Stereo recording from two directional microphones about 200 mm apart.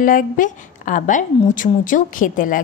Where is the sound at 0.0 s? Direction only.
40° left (ahead or behind).